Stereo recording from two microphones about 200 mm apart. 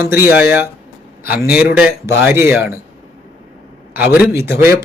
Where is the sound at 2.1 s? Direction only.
15° right (ahead or behind).